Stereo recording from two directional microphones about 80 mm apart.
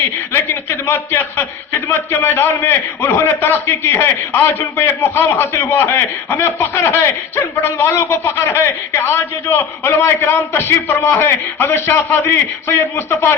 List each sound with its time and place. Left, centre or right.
0.0 s a man's voice: left